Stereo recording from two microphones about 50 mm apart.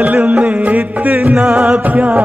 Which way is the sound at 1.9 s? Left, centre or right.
Right.